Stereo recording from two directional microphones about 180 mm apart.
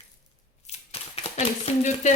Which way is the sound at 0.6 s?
35° left (ahead or behind).